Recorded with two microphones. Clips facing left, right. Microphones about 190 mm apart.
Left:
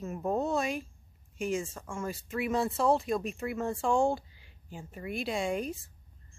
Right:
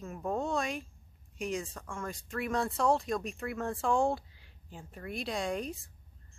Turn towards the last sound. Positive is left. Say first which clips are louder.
# left 3 dB
turn(degrees=0)  # may be behind; listen again after turning